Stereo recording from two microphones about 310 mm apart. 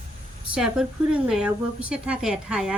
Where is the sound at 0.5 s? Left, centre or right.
Centre.